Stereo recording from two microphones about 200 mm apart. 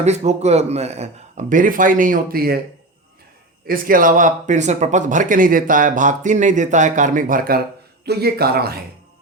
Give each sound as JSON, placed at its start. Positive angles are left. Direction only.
{"t": 0.0, "sound": "speech", "side_deg": -35}
{"t": 3.7, "sound": "speech", "side_deg": -45}